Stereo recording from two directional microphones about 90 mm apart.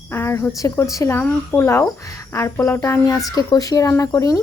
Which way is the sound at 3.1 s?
45° left (ahead or behind).